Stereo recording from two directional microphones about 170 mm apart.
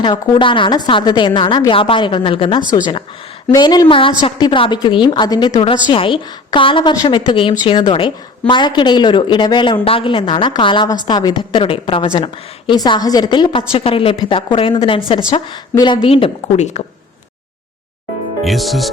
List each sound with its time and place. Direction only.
0.0 s a woman's voice: 30° left (ahead or behind)
18.4 s speech: centre (ahead or behind)